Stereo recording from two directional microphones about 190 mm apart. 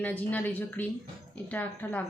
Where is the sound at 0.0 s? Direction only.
10° left (ahead or behind).